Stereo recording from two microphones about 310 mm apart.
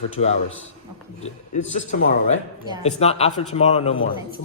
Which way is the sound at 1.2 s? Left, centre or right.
Left.